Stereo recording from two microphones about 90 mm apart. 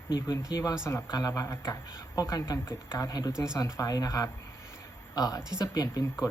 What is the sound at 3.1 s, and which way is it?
Speech, 45° left (ahead or behind).